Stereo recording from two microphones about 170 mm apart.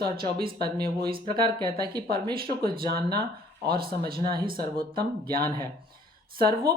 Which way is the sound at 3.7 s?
60° right (ahead or behind).